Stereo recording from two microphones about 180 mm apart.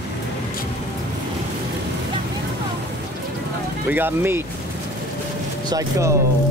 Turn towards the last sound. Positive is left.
turn(degrees=-15)  # may be behind; listen again after turning